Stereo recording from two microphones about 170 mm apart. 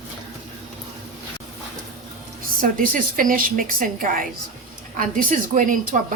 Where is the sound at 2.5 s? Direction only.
55° right (ahead or behind).